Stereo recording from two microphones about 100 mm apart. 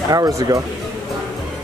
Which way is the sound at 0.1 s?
35° right (ahead or behind).